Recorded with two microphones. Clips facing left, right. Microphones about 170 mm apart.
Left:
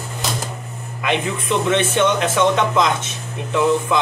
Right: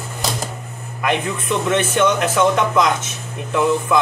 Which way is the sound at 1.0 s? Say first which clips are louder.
Even; 20° left (ahead or behind).